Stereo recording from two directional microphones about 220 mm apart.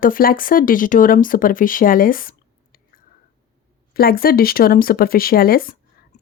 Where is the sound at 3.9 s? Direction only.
45° left (ahead or behind).